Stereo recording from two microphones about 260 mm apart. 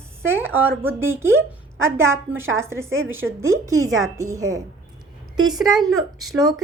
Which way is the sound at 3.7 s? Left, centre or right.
Right.